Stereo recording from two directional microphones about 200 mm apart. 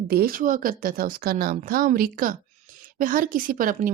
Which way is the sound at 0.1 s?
45° right (ahead or behind).